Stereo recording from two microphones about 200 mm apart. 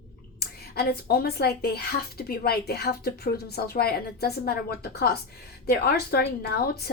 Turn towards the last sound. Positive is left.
turn(degrees=50)  # may be behind; listen again after turning